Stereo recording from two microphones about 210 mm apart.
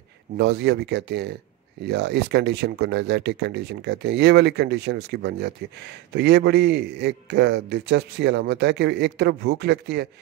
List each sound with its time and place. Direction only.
0.4 s speech: 50° right (ahead or behind)